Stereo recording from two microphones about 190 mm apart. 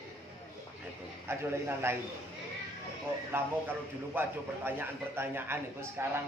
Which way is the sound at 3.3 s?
10° right (ahead or behind).